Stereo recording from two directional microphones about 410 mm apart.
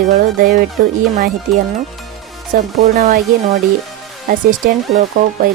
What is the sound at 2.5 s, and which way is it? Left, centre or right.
Speech, centre.